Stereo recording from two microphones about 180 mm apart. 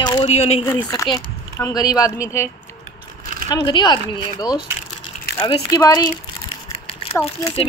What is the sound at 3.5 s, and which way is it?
Speech, 25° left (ahead or behind).